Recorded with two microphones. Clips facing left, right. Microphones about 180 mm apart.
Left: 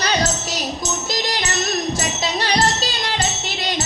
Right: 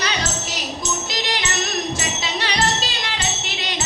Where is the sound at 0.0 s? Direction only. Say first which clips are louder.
Left 4 dB; 40° left (ahead or behind).